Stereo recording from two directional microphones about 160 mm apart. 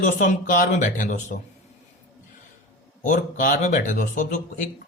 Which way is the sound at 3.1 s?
55° left (ahead or behind).